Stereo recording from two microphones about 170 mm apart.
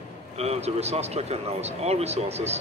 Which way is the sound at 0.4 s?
40° right (ahead or behind).